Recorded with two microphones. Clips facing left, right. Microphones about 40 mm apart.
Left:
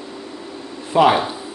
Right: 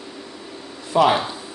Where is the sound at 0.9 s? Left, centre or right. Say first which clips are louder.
Left 3 dB; centre.